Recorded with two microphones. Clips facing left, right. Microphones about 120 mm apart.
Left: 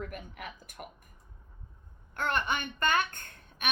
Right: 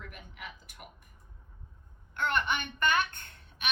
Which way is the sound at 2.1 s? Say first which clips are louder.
Even; 40° left (ahead or behind).